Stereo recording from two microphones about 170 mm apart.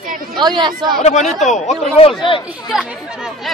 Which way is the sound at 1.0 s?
45° left (ahead or behind).